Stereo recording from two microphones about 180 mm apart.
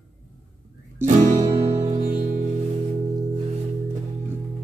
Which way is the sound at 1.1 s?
40° right (ahead or behind).